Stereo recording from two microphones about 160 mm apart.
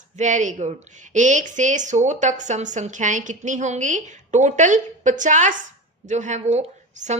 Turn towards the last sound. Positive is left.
turn(degrees=-45)  # may be behind; listen again after turning